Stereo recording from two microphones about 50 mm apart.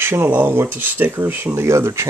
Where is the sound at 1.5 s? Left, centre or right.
Right.